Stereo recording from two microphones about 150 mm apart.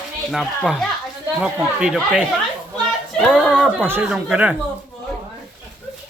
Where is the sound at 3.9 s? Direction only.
15° right (ahead or behind).